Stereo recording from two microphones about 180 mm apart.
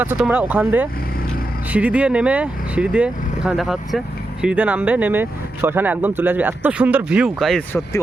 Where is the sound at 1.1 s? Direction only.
55° left (ahead or behind).